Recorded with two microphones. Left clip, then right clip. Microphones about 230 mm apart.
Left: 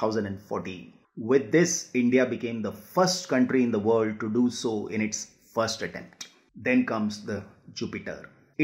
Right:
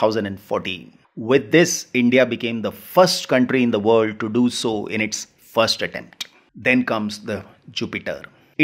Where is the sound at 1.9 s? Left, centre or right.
Right.